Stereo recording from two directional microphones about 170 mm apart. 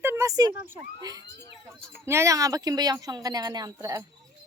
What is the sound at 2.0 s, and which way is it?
Speech, 15° right (ahead or behind).